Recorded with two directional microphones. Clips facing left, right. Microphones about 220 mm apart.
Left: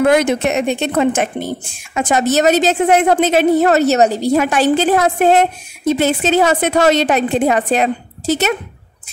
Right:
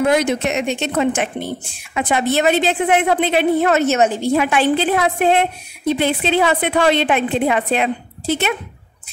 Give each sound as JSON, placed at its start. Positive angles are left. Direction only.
{"t": 0.0, "sound": "a woman's voice", "side_deg": 55}